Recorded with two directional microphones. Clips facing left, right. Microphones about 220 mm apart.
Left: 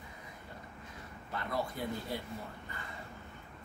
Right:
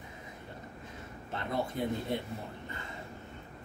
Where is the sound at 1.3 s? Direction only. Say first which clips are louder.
Right 3 dB; 25° right (ahead or behind).